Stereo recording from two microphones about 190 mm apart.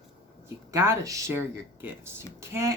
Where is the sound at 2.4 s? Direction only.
15° right (ahead or behind).